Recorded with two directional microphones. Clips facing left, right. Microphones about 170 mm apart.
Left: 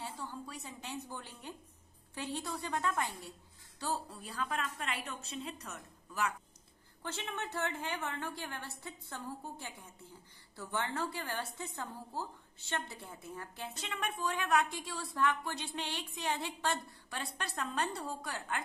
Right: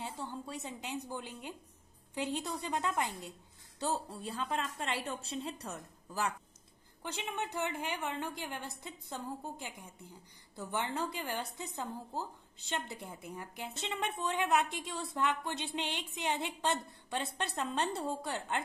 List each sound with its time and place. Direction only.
0.0 s a sound: 25° right (ahead or behind)
2.1 s a woman's voice: 20° right (ahead or behind)
7.0 s a woman's voice: 15° right (ahead or behind)